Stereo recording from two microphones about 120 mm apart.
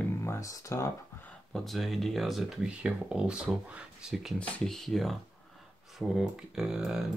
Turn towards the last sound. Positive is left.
turn(degrees=-5)  # may be behind; listen again after turning